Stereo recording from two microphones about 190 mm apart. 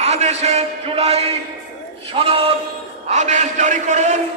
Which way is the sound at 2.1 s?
30° right (ahead or behind).